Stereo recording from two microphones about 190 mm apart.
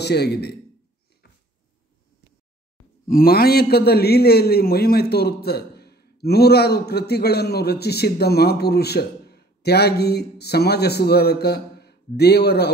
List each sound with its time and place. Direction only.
0.0 s a man's voice: 60° left (ahead or behind)
3.1 s a man's voice: 50° left (ahead or behind)